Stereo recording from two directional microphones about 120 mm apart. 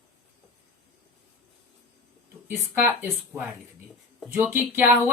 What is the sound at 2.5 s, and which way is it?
Speech, 15° right (ahead or behind).